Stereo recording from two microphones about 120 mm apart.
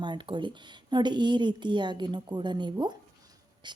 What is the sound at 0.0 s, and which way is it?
A woman's voice, 40° right (ahead or behind).